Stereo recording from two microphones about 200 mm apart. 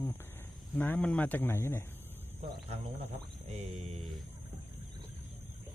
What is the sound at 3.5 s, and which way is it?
Mantra, 35° right (ahead or behind).